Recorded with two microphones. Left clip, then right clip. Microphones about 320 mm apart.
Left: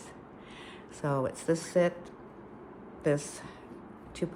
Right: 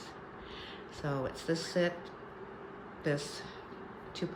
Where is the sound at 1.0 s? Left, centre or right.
Centre.